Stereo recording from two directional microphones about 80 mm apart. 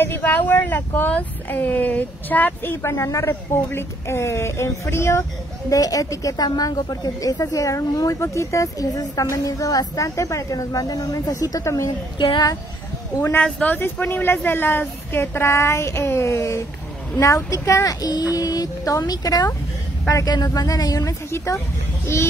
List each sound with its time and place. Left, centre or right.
0.0 s a woman's voice: left
5.7 s a woman's voice: left
7.5 s a woman's voice: left
12.2 s speech: left
13.4 s a woman's voice: centre; by 21.5 s left